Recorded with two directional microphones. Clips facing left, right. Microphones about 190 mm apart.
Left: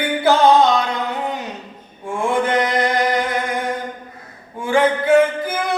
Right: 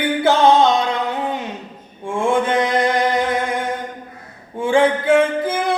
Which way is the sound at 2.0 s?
25° right (ahead or behind).